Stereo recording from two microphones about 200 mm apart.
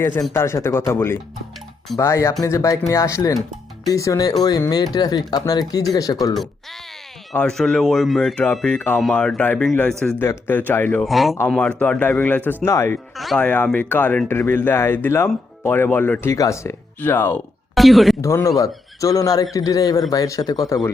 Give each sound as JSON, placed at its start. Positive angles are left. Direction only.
{"t": 0.0, "sound": "speech", "side_deg": 10}
{"t": 6.3, "sound": "speech", "side_deg": 0}
{"t": 13.1, "sound": "speech", "side_deg": 0}
{"t": 18.2, "sound": "speech", "side_deg": 15}